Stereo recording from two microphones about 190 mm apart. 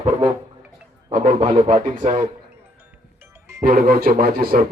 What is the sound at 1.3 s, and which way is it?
Speech, 25° right (ahead or behind).